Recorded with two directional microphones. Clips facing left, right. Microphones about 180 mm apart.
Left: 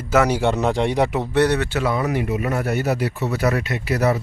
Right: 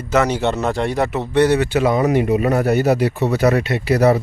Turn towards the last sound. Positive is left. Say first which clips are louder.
# right 6 dB
turn(degrees=-30)  # may be behind; listen again after turning